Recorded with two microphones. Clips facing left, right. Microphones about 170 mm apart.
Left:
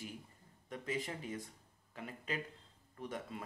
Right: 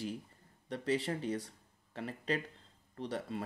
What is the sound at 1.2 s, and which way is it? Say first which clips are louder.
Speech: right 7 dB; 80° right.